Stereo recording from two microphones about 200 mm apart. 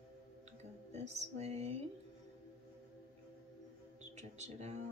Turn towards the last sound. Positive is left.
turn(degrees=-35)  # may be behind; listen again after turning